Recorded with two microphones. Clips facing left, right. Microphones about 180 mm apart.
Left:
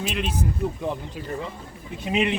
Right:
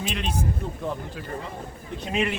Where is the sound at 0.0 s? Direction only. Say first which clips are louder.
Left 2 dB; 5° left (ahead or behind).